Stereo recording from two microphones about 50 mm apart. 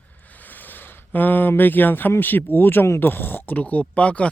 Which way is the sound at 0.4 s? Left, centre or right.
Left.